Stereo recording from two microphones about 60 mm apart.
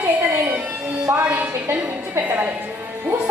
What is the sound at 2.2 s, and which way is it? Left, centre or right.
Speech, right.